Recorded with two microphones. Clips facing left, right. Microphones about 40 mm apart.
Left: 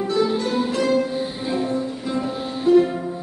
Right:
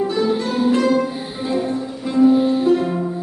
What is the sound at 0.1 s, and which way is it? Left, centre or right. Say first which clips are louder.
Music: right 1 dB; centre.